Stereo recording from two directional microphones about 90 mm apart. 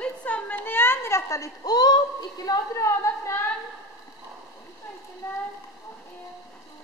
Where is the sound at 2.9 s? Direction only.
30° left (ahead or behind).